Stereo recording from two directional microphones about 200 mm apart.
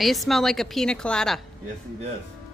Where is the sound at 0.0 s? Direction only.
Centre (ahead or behind).